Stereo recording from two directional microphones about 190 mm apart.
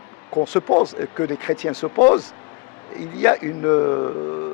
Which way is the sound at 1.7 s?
25° left (ahead or behind).